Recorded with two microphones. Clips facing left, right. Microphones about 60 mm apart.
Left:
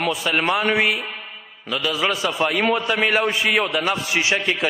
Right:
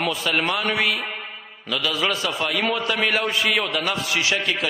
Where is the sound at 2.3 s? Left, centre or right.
Left.